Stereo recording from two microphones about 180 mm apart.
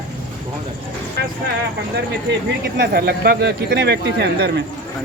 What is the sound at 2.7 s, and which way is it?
Speech, 60° right (ahead or behind).